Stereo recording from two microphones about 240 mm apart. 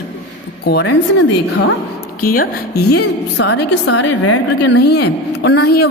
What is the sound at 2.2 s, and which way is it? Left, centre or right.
A woman's voice, left.